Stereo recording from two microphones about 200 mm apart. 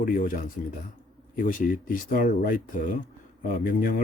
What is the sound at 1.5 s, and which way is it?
Speech, 45° left (ahead or behind).